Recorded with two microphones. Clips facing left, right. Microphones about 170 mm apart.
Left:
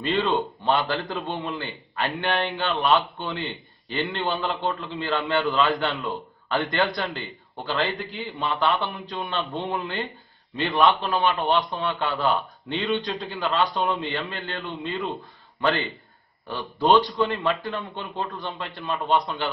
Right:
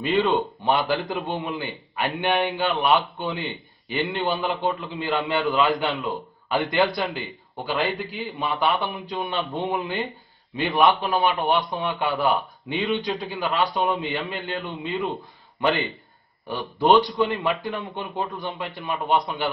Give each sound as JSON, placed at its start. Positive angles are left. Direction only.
{"t": 0.0, "sound": "a man's voice", "side_deg": -15}
{"t": 5.9, "sound": "a man's voice", "side_deg": 0}
{"t": 6.5, "sound": "a man's voice", "side_deg": -15}
{"t": 8.0, "sound": "a man's voice", "side_deg": 0}
{"t": 8.5, "sound": "a man's voice", "side_deg": -15}